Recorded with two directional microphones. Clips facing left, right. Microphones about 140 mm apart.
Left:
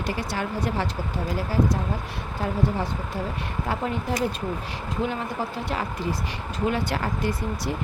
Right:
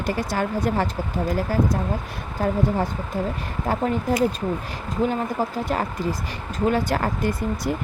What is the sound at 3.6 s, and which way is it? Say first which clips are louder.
A woman's voice: right 6 dB; 45° right (ahead or behind).